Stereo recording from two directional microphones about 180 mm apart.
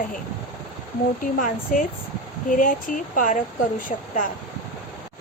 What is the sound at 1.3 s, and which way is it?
Speech, 50° left (ahead or behind).